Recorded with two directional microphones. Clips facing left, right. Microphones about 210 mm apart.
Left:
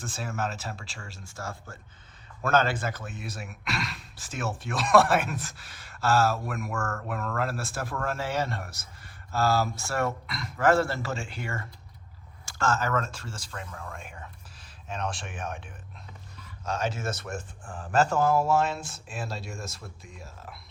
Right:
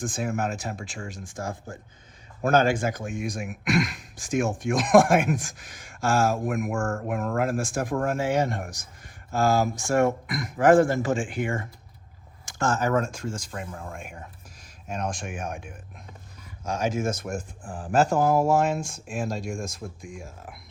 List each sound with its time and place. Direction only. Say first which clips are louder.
0.0 s speech: right 5 dB; 15° right (ahead or behind)
6.7 s speech: right 5 dB; 30° right (ahead or behind)
7.1 s speech: right 5 dB; 15° right (ahead or behind)
13.7 s speech: right 4 dB; 25° right (ahead or behind)
14.0 s speech: right 3 dB; 10° right (ahead or behind)
17.6 s speech: right 4 dB; 35° right (ahead or behind)
17.9 s speech: right 2 dB; 10° right (ahead or behind)